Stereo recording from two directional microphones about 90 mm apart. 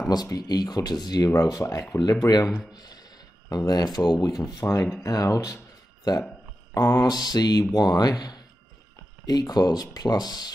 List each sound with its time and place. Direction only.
0.1 s speech: 50° left (ahead or behind)
6.7 s speech: 40° left (ahead or behind)